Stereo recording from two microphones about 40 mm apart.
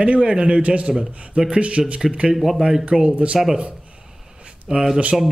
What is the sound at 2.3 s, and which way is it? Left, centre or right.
Speech, centre.